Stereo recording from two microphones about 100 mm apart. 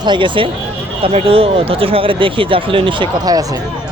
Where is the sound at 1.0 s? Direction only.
70° right (ahead or behind).